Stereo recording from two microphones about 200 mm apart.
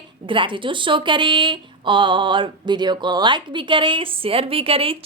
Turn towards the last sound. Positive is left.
turn(degrees=-30)  # may be behind; listen again after turning